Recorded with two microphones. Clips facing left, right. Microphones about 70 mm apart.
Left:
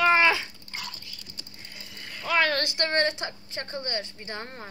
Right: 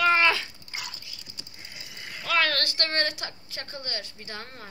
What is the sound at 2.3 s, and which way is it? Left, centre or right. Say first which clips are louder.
A woman's voice: left 1 dB; centre.